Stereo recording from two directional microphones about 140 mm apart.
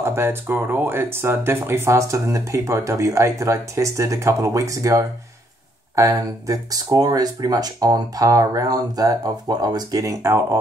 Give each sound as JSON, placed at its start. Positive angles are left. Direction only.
{"t": 0.0, "sound": "speech", "side_deg": -15}